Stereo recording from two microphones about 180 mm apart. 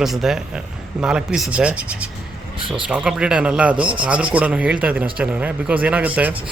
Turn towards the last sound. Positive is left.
turn(degrees=-10)  # may be behind; listen again after turning